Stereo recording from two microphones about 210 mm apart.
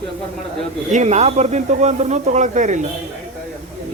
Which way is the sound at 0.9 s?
30° right (ahead or behind).